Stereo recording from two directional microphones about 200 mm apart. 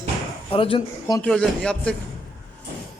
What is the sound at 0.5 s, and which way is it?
Speech, 25° left (ahead or behind).